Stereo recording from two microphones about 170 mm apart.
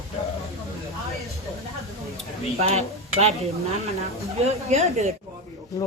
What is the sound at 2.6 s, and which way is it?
Speech, 40° right (ahead or behind).